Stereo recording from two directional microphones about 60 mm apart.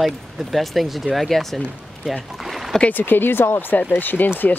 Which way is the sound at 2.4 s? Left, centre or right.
Centre.